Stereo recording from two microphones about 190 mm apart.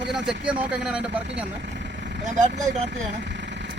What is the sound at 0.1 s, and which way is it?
Speech, 5° right (ahead or behind).